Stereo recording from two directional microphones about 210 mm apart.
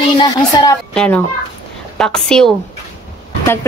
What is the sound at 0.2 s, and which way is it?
Speech, 20° left (ahead or behind).